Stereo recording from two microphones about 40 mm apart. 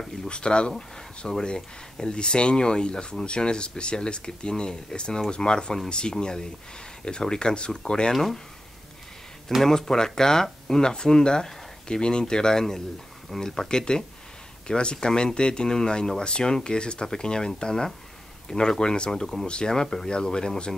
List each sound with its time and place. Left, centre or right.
0.3 s speech: left
8.1 s speech: centre
9.6 s speech: centre
19.7 s speech: centre